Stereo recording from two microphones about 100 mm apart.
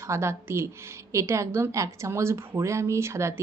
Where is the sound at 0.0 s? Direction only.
30° right (ahead or behind).